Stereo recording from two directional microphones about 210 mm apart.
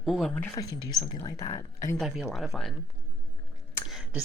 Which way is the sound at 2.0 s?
Centre (ahead or behind).